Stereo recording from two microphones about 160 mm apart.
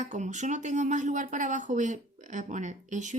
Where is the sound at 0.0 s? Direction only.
50° right (ahead or behind).